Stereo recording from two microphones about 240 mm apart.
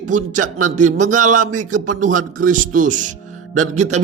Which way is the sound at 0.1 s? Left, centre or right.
Right.